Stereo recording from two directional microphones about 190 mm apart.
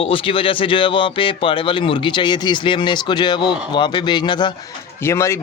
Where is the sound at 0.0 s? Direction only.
30° left (ahead or behind).